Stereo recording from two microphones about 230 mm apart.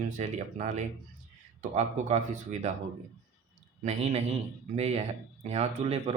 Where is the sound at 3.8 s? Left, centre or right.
Right.